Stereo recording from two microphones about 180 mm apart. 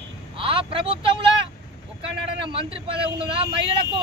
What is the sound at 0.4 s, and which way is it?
Vehicle, 30° right (ahead or behind).